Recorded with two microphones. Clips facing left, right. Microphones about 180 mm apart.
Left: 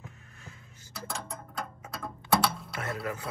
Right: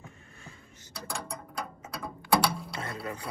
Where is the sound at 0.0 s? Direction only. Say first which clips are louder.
Even; centre (ahead or behind).